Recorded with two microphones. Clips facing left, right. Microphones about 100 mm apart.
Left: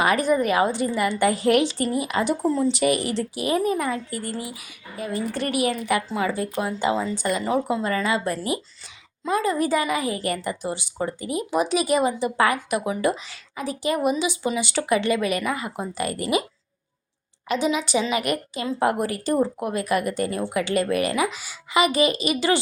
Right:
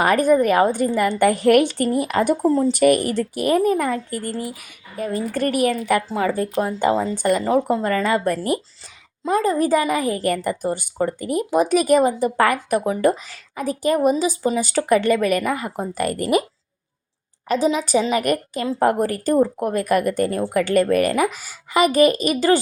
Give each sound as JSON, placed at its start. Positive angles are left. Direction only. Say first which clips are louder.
{"t": 0.0, "sound": "speech", "louder": "right 4 dB", "side_deg": -45}
{"t": 9.2, "sound": "speech", "louder": "right 4 dB", "side_deg": -40}
{"t": 17.5, "sound": "speech", "louder": "right 4 dB", "side_deg": -40}